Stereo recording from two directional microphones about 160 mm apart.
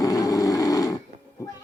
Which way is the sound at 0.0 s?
20° left (ahead or behind).